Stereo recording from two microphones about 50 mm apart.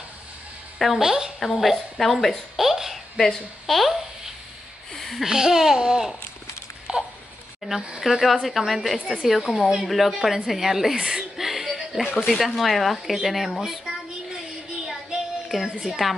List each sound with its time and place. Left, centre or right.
0.7 s a woman's voice: centre
1.0 s speech: centre
1.4 s a woman's voice: centre
2.6 s a sound: centre
3.6 s a woman's voice: centre
4.9 s a sound: centre
5.2 s speech: centre
6.9 s a sound: centre
7.6 s a woman's voice: centre
14.9 s child singing: centre
15.8 s a woman's voice: centre